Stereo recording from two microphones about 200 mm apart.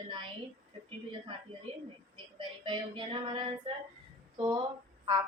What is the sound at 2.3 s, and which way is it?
A woman's voice, 25° right (ahead or behind).